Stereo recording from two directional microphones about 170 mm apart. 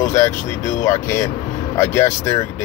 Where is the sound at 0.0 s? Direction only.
15° left (ahead or behind).